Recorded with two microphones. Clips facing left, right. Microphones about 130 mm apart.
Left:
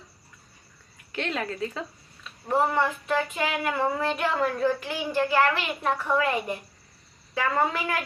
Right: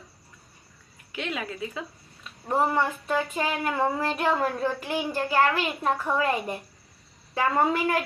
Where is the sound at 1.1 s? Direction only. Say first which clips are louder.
Left 2 dB; 5° right (ahead or behind).